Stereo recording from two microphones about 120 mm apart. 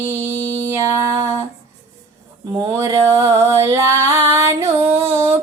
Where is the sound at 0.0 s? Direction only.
20° right (ahead or behind).